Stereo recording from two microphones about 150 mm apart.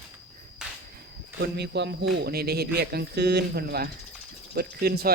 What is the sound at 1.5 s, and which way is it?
Speech, 90° right.